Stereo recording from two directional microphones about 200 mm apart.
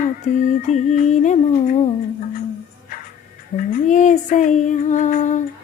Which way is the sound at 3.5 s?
40° left (ahead or behind).